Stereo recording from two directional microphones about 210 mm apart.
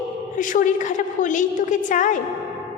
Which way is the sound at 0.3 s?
40° left (ahead or behind).